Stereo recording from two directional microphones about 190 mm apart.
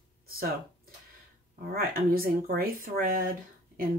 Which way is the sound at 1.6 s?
50° right (ahead or behind).